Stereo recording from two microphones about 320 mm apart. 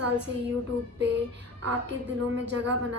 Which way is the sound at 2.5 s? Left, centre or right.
Right.